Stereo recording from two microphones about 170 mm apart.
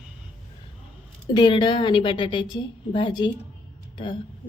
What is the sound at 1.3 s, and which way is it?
A woman's voice, 25° left (ahead or behind).